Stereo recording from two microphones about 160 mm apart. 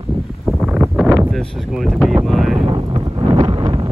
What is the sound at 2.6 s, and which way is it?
Wind noise, 30° right (ahead or behind).